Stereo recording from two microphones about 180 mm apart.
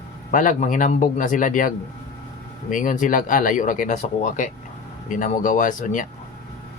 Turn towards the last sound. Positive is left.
turn(degrees=45)  # may be behind; listen again after turning